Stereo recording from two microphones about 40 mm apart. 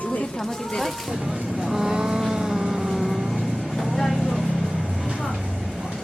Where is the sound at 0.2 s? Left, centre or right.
Centre.